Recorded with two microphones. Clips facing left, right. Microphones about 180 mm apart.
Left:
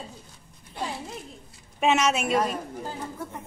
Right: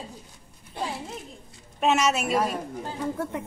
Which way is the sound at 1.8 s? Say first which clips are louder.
Even; centre (ahead or behind).